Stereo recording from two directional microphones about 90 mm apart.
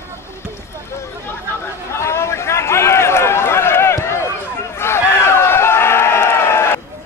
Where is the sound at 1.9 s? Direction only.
30° left (ahead or behind).